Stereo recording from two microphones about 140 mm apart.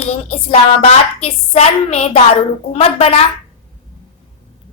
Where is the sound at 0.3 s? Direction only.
45° left (ahead or behind).